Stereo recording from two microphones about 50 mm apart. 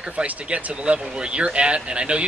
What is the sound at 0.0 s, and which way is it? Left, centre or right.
Speech, right.